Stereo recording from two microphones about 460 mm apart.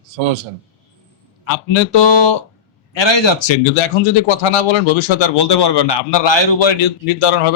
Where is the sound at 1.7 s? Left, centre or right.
Left.